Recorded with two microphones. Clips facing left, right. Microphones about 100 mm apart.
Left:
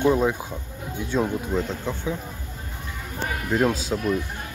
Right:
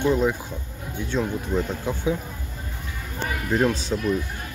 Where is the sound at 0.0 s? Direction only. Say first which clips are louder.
Left 1 dB; 15° left (ahead or behind).